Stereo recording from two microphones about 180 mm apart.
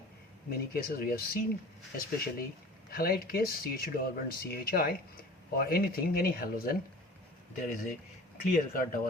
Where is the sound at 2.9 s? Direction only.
55° left (ahead or behind).